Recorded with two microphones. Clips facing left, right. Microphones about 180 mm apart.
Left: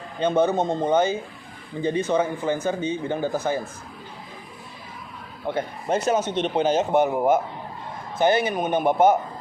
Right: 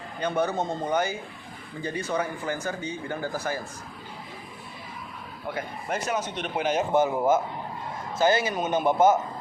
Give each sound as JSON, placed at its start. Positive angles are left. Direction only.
{"t": 0.2, "sound": "speech", "side_deg": 20}
{"t": 5.5, "sound": "speech", "side_deg": 25}
{"t": 8.4, "sound": "a man's voice", "side_deg": 60}